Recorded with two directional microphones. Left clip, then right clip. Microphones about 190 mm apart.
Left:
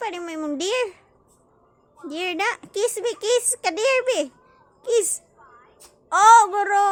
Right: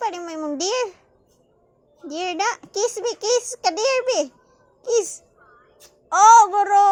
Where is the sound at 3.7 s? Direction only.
5° left (ahead or behind).